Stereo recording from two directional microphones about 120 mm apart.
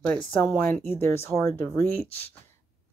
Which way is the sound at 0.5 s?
20° left (ahead or behind).